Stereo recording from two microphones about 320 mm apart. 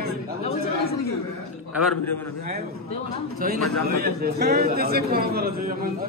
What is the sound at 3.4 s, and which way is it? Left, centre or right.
A man's voice, right.